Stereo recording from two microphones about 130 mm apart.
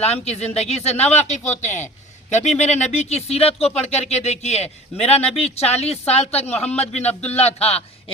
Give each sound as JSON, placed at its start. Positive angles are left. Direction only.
{"t": 0.0, "sound": "a man's voice", "side_deg": 55}